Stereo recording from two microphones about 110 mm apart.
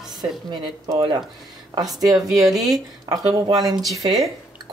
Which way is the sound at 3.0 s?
35° right (ahead or behind).